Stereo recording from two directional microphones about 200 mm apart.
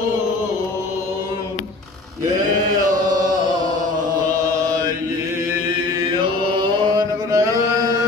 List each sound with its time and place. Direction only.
6.6 s music: 20° right (ahead or behind)